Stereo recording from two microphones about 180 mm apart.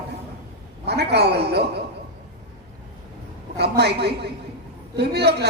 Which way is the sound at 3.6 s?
65° right (ahead or behind).